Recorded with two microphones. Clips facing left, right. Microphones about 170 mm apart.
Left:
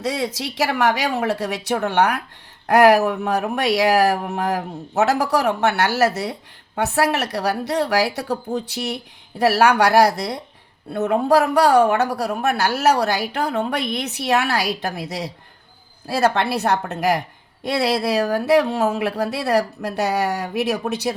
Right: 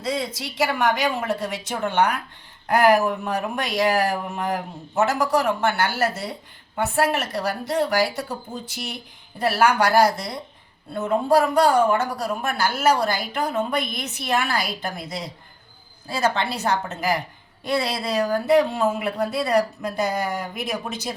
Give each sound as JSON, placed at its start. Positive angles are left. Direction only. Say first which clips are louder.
{"t": 0.0, "sound": "a woman's voice", "louder": "left 3 dB", "side_deg": 80}